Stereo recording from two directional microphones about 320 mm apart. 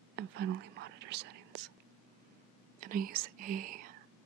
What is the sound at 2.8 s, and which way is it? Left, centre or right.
Speech, right.